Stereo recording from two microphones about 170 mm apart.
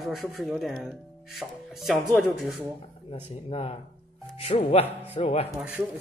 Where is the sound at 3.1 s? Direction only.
35° left (ahead or behind).